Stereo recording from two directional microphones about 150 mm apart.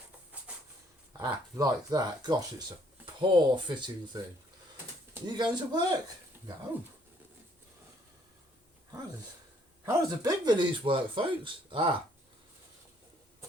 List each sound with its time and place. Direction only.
1.2 s speech: 25° right (ahead or behind)
5.2 s speech: 30° right (ahead or behind)
9.8 s speech: 25° right (ahead or behind)